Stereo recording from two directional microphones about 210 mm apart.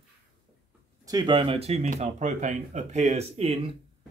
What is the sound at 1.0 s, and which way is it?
Speech, 20° right (ahead or behind).